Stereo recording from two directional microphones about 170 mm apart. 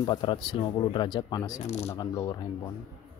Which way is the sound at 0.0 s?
25° left (ahead or behind).